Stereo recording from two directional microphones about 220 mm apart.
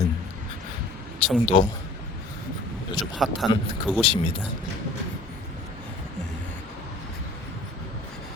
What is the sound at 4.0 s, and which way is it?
Speech, 25° left (ahead or behind).